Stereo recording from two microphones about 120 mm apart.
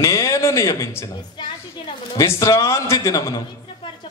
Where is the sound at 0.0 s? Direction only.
30° left (ahead or behind).